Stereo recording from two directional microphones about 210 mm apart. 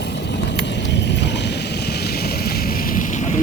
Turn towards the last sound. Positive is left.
turn(degrees=35)  # may be behind; listen again after turning